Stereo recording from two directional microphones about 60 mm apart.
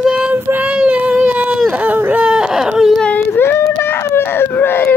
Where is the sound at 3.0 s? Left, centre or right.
Centre.